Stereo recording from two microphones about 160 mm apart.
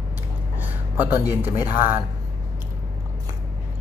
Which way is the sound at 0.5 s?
10° right (ahead or behind).